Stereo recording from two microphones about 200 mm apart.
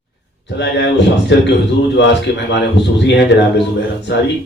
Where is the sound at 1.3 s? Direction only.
60° left (ahead or behind).